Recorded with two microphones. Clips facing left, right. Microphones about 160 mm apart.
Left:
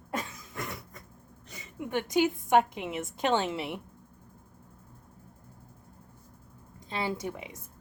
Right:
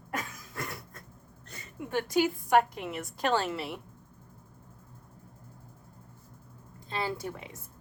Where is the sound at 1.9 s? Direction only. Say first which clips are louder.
Left 1 dB; 20° left (ahead or behind).